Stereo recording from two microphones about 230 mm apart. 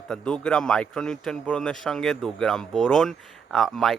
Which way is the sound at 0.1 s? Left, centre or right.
Centre.